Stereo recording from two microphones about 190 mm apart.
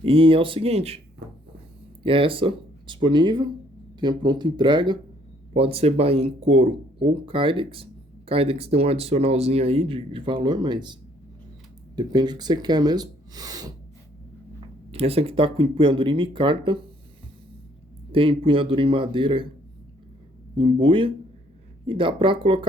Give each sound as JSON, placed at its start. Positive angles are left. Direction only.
{"t": 0.0, "sound": "speech", "side_deg": -30}
{"t": 2.0, "sound": "speech", "side_deg": -30}
{"t": 11.9, "sound": "speech", "side_deg": -20}
{"t": 14.9, "sound": "speech", "side_deg": -30}
{"t": 18.1, "sound": "speech", "side_deg": -30}
{"t": 20.6, "sound": "speech", "side_deg": -25}